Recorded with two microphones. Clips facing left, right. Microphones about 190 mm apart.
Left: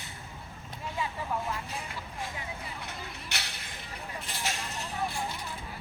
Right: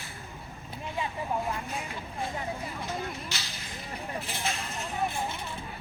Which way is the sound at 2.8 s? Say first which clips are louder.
Right 7 dB; 65° left (ahead or behind).